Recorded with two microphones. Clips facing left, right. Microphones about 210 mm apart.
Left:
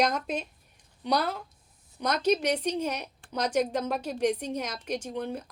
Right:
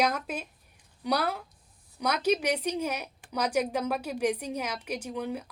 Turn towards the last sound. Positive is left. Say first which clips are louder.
# even
turn(degrees=-10)  # may be behind; listen again after turning